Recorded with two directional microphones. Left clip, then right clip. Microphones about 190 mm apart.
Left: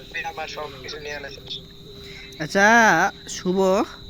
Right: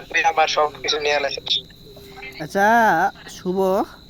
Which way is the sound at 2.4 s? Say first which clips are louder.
Even; 5° left (ahead or behind).